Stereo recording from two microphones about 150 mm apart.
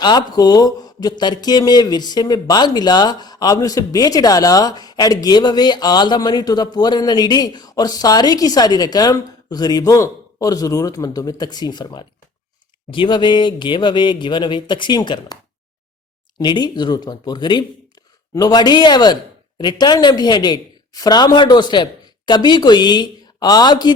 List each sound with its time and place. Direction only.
0.0 s speech: 30° left (ahead or behind)
16.4 s speech: 30° left (ahead or behind)